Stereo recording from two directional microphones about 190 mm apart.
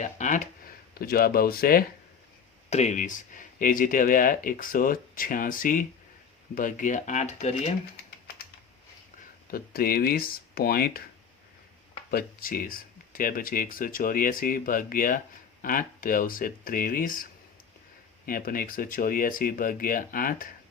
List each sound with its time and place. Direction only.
0.0 s a sound: 40° left (ahead or behind)
0.9 s speech: 50° left (ahead or behind)
2.6 s speech: 35° left (ahead or behind)
9.5 s speech: 50° left (ahead or behind)
12.1 s speech: 50° left (ahead or behind)
18.3 s speech: 50° left (ahead or behind)